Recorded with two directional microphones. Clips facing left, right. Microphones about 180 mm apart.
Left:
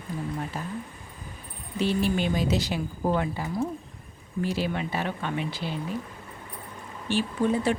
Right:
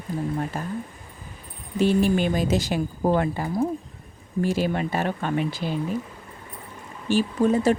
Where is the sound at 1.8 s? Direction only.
45° right (ahead or behind).